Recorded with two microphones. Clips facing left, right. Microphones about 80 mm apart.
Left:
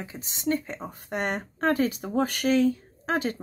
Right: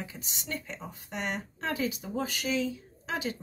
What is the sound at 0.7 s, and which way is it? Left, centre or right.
Speech, left.